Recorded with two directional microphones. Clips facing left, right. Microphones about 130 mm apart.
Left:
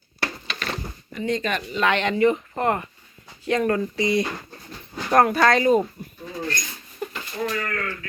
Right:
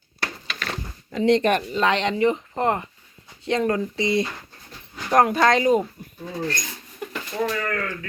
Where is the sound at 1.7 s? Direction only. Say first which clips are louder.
Even; 30° right (ahead or behind).